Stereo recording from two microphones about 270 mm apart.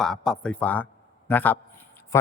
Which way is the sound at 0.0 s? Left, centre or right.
Centre.